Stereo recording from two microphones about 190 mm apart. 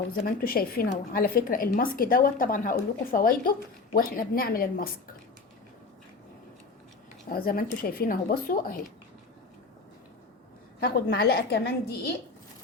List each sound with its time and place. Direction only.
0.1 s a woman's voice: 50° left (ahead or behind)
7.3 s a woman's voice: 50° left (ahead or behind)
10.8 s a woman's voice: 55° left (ahead or behind)